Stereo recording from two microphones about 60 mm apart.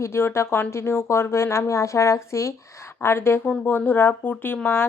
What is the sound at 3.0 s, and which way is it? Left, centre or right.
Speech, left.